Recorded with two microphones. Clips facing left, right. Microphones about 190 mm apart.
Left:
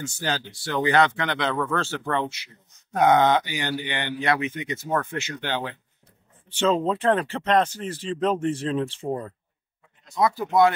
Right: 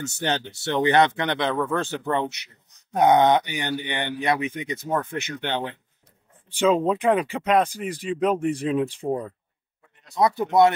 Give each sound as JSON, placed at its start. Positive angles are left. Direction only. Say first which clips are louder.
{"t": 0.0, "sound": "speech", "louder": "right 2 dB", "side_deg": -25}
{"t": 6.5, "sound": "speech", "louder": "right 2 dB", "side_deg": -10}
{"t": 10.1, "sound": "speech", "louder": "right 2 dB", "side_deg": -25}